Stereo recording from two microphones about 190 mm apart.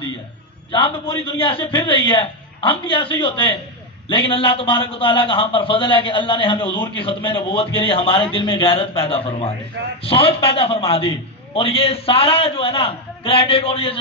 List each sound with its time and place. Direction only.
0.7 s a man's voice: 30° left (ahead or behind)